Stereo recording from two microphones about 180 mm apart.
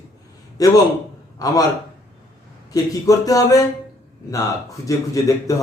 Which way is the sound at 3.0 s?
20° left (ahead or behind).